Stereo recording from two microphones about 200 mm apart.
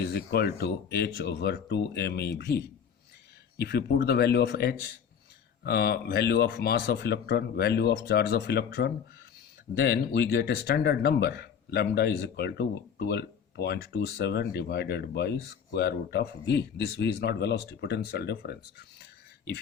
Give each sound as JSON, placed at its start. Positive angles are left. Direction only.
{"t": 0.0, "sound": "speech", "side_deg": 50}